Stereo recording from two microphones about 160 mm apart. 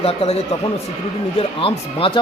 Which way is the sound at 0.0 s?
40° left (ahead or behind).